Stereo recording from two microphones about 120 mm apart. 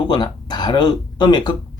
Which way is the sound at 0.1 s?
35° left (ahead or behind).